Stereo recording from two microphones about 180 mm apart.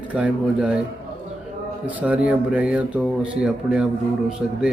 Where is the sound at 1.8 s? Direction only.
10° right (ahead or behind).